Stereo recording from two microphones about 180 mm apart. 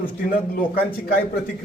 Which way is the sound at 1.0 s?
55° left (ahead or behind).